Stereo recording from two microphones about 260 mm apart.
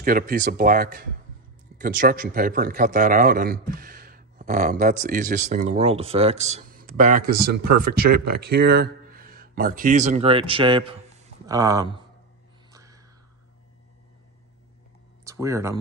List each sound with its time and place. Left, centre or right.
0.0 s a man's voice: right; by 11.9 s centre
12.7 s a sound: centre
15.2 s speech: centre